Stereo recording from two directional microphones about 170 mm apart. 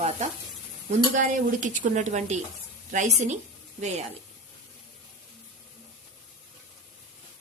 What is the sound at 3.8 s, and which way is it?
Sizzle, 40° right (ahead or behind).